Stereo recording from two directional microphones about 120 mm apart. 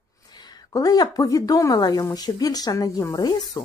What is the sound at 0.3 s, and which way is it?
A woman's voice, 35° left (ahead or behind).